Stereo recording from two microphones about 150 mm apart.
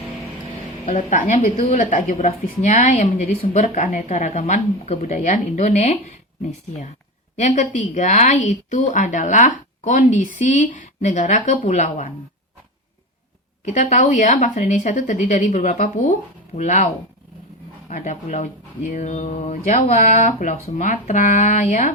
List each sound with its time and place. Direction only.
0.9 s a woman's voice: 55° left (ahead or behind)
1.4 s a woman's voice: 40° left (ahead or behind)
7.3 s a woman's voice: 55° left (ahead or behind)
13.7 s a woman's voice: 55° left (ahead or behind)